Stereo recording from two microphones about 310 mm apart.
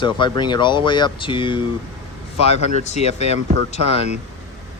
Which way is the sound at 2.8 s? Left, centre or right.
Left.